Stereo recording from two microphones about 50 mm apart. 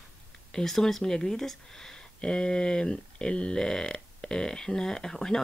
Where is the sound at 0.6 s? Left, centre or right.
Centre.